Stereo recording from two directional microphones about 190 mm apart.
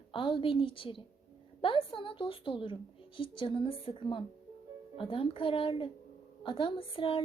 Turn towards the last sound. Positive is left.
turn(degrees=30)  # may be behind; listen again after turning